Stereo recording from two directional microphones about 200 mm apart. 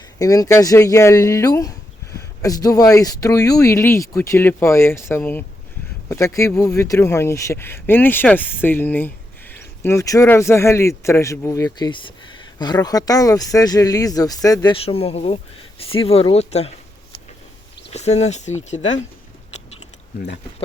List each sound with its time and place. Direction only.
0.2 s speech: 15° left (ahead or behind)
17.9 s speech: 35° left (ahead or behind)